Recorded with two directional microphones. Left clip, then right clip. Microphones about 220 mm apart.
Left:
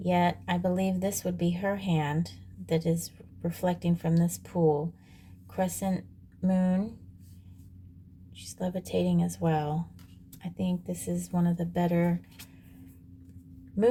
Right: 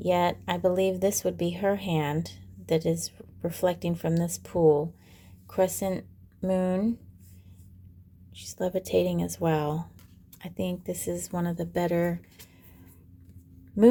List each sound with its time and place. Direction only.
0.0 s speech: 25° right (ahead or behind)
8.4 s speech: 30° right (ahead or behind)